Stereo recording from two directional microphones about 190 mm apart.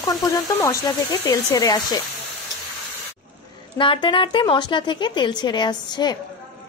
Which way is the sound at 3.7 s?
25° left (ahead or behind).